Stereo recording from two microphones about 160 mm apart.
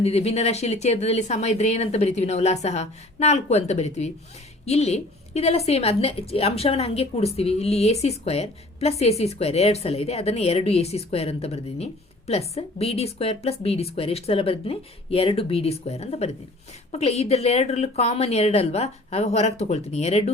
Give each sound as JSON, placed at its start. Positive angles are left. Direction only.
{"t": 0.0, "sound": "a woman's voice", "side_deg": 40}